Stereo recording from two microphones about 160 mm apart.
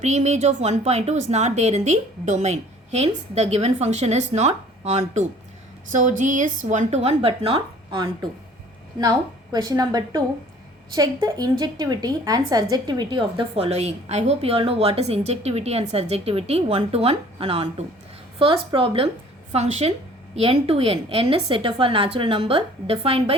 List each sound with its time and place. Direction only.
0.0 s a woman's voice: 45° right (ahead or behind)